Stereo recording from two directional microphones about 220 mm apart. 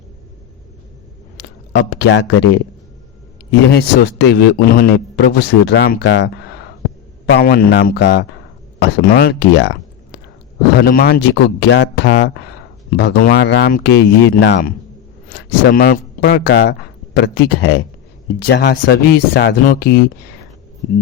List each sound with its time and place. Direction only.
1.4 s a man's voice: 55° left (ahead or behind)
3.7 s speech: 50° left (ahead or behind)
10.8 s speech: 45° left (ahead or behind)